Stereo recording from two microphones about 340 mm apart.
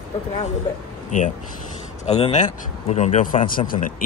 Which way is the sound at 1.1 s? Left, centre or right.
Left.